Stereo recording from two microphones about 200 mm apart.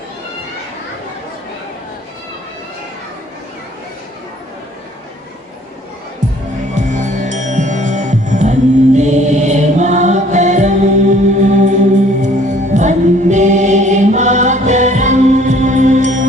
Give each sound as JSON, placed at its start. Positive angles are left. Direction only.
{"t": 6.7, "sound": "music", "side_deg": -35}